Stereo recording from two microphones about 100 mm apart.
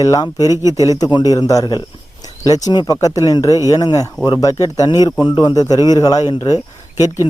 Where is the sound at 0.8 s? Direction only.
40° left (ahead or behind).